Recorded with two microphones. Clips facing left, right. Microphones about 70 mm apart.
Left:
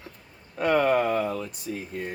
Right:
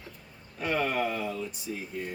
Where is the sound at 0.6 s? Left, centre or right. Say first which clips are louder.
Left 7 dB; left.